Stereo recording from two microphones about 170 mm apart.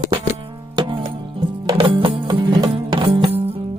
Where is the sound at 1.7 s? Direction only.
30° right (ahead or behind).